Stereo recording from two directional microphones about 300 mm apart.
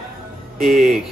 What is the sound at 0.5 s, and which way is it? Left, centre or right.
Speech, centre.